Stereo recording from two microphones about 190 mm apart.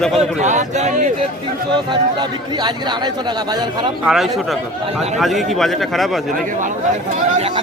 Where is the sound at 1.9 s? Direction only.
25° right (ahead or behind).